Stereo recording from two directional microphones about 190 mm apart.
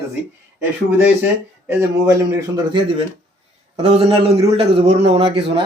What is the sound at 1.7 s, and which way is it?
A man's voice, 15° right (ahead or behind).